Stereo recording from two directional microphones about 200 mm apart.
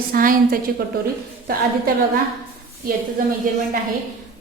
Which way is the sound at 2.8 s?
45° right (ahead or behind).